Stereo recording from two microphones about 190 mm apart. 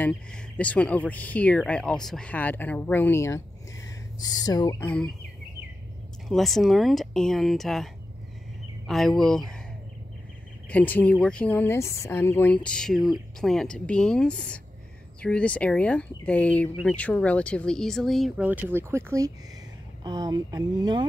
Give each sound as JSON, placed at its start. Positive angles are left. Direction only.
{"t": 0.0, "sound": "speech", "side_deg": 5}
{"t": 6.2, "sound": "speech", "side_deg": 0}
{"t": 10.7, "sound": "speech", "side_deg": 10}